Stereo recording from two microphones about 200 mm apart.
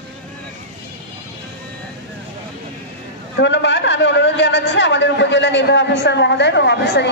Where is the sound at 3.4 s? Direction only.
60° left (ahead or behind).